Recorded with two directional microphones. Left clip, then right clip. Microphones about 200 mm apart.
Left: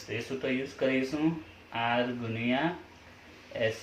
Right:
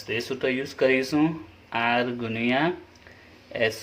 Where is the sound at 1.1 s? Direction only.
60° right (ahead or behind).